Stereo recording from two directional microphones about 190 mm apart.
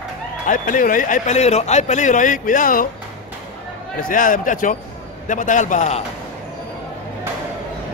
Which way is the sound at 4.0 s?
45° left (ahead or behind).